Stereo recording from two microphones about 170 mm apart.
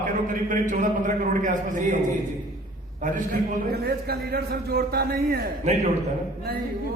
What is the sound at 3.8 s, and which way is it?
Speech, 70° right (ahead or behind).